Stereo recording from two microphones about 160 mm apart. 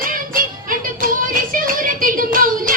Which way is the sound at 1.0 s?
60° right (ahead or behind).